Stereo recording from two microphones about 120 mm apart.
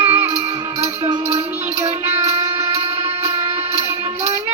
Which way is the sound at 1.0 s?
25° right (ahead or behind).